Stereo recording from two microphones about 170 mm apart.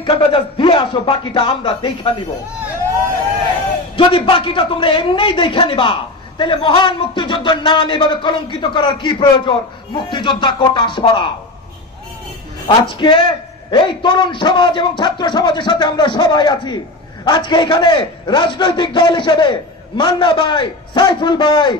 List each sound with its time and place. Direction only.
0.0 s a man's voice: 30° left (ahead or behind)
3.9 s a man's voice: 30° left (ahead or behind)
12.6 s a man's voice: 30° left (ahead or behind)